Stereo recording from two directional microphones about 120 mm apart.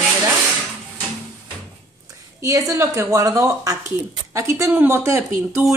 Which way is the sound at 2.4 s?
25° right (ahead or behind).